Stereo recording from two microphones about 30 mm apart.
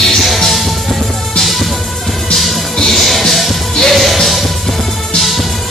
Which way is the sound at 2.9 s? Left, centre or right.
Centre.